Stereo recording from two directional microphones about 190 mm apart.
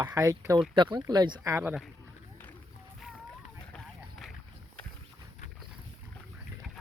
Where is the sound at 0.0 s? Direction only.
20° right (ahead or behind).